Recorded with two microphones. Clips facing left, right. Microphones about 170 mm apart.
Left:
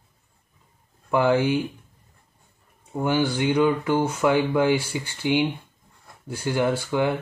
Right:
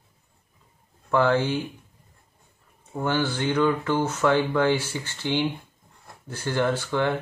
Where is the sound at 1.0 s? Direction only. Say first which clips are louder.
Left 1 dB; 10° left (ahead or behind).